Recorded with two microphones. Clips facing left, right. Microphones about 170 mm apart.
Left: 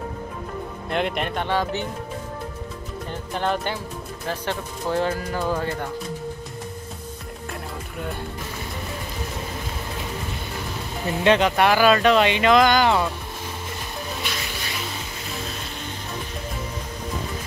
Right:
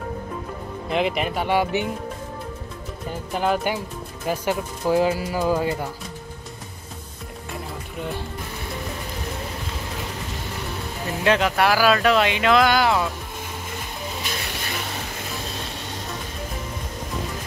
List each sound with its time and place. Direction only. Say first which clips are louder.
0.8 s speech: right 2 dB; centre (ahead or behind)
3.1 s speech: right 2 dB; 5° right (ahead or behind)
11.1 s speech: left 2 dB; centre (ahead or behind)